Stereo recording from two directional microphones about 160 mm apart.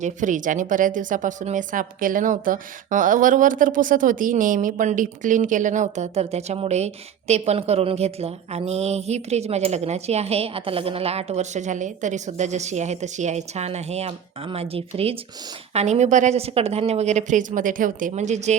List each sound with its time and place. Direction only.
0.0 s a woman's voice: 50° right (ahead or behind)